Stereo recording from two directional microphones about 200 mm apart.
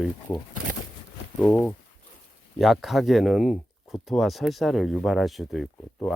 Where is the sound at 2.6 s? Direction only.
Centre (ahead or behind).